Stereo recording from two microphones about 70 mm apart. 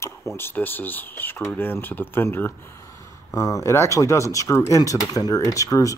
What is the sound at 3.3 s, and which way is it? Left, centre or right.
Speech, left.